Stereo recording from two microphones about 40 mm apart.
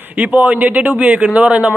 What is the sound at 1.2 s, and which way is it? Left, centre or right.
Speech, right.